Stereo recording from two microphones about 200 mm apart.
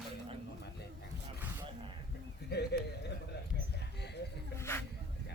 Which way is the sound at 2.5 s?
55° left (ahead or behind).